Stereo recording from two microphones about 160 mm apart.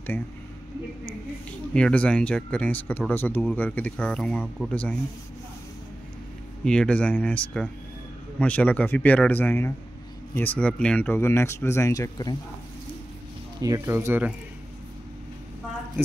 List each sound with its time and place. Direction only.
1.7 s speech: 5° left (ahead or behind)
6.6 s speech: 5° left (ahead or behind); by 12.4 s 25° left (ahead or behind)
13.6 s speech: 20° right (ahead or behind)